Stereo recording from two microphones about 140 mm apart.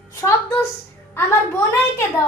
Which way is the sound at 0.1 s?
20° left (ahead or behind).